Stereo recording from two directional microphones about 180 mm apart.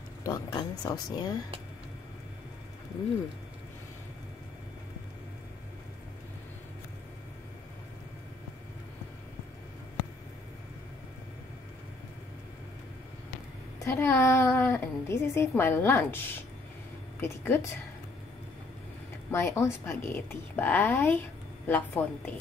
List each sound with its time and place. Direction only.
0.2 s speech: 20° left (ahead or behind)
13.7 s a woman's voice: 15° left (ahead or behind)
19.3 s a woman's voice: 15° left (ahead or behind)